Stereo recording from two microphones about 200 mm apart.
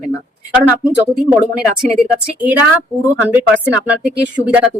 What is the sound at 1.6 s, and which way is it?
Speech, 5° right (ahead or behind).